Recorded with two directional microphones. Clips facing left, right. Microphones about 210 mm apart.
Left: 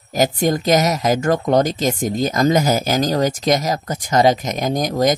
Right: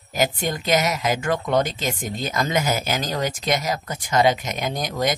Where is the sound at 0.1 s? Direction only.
40° left (ahead or behind).